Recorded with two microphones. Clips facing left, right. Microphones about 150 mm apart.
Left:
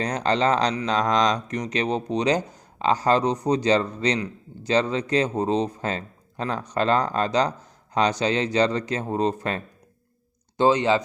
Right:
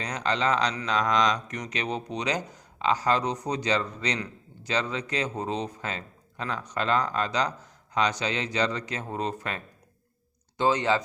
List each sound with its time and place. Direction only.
0.0 s speech: 40° left (ahead or behind)
10.6 s speech: 20° left (ahead or behind)